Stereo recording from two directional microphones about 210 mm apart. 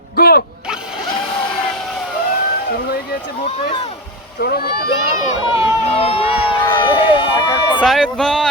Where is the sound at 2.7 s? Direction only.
45° left (ahead or behind).